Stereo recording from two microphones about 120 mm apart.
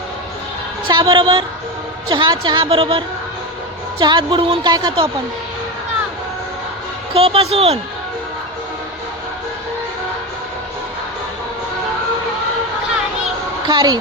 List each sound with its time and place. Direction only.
0.9 s a woman's voice: 45° right (ahead or behind)
2.6 s speech: 50° right (ahead or behind)
4.0 s speech: 45° right (ahead or behind)
7.1 s a man's voice: 55° right (ahead or behind)
13.7 s a woman's voice: 35° right (ahead or behind)